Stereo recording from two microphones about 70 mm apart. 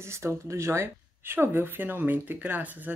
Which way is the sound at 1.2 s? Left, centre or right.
Right.